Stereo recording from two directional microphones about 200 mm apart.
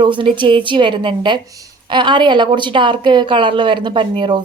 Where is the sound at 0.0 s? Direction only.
25° right (ahead or behind).